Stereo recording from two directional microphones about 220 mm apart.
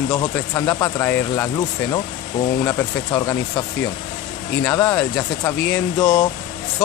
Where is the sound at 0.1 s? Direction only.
20° left (ahead or behind).